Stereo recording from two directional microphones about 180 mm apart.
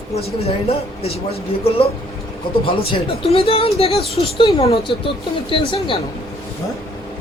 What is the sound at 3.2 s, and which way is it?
Speech, 30° left (ahead or behind).